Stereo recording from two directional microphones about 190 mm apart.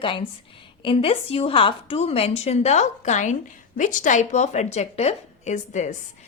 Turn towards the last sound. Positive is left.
turn(degrees=40)  # may be behind; listen again after turning